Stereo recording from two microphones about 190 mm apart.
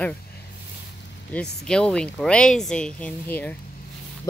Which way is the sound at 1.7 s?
5° left (ahead or behind).